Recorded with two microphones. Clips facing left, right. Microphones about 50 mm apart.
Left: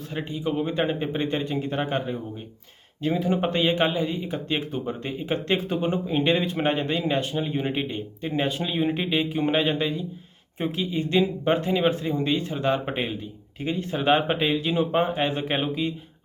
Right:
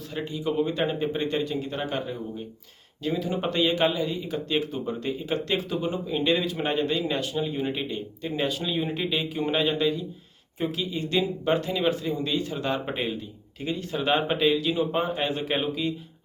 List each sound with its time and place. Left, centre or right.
0.1 s a man's voice: left